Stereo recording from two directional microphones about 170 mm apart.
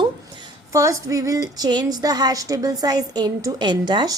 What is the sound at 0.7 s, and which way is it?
A woman's voice, 20° right (ahead or behind).